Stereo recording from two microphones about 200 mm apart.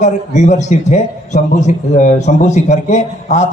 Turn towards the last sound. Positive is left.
turn(degrees=35)  # may be behind; listen again after turning